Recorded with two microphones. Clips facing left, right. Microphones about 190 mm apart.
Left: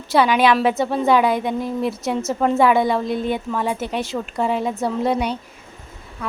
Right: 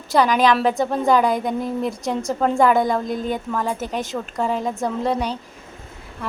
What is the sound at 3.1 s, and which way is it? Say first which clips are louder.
Speech: left 2 dB; 40° right (ahead or behind).